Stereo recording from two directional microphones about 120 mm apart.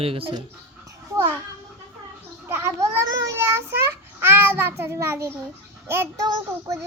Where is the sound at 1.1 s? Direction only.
25° right (ahead or behind).